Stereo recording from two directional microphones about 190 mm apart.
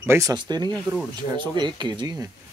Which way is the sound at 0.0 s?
15° right (ahead or behind).